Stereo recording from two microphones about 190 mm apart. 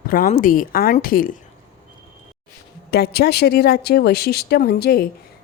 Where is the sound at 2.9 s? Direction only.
55° left (ahead or behind).